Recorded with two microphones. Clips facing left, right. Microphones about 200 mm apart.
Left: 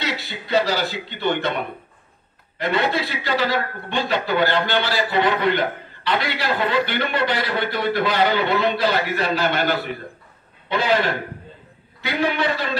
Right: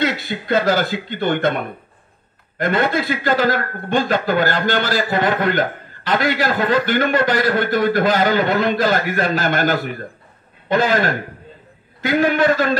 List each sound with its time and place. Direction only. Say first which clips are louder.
0.0 s a man's voice: right 7 dB; 50° right (ahead or behind)